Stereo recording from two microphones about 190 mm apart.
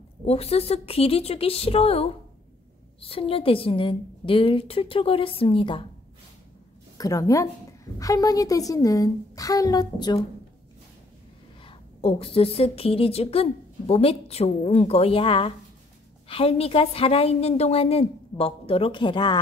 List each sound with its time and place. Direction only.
0.2 s a woman's voice: 30° left (ahead or behind)
7.0 s a woman's voice: 20° left (ahead or behind)
11.6 s a woman's voice: 30° left (ahead or behind)